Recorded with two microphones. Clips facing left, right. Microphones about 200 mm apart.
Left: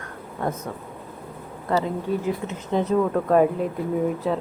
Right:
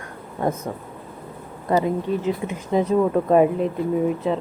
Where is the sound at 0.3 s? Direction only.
15° right (ahead or behind).